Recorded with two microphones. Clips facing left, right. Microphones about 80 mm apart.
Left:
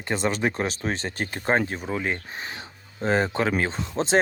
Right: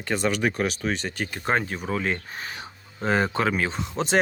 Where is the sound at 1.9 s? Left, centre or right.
Centre.